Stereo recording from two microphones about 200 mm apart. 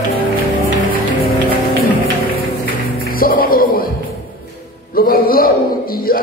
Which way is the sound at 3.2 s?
45° left (ahead or behind).